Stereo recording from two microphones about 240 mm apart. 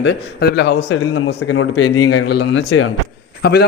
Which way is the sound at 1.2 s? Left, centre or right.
Left.